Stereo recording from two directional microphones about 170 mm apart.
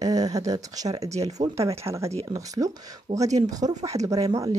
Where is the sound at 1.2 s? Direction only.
35° right (ahead or behind).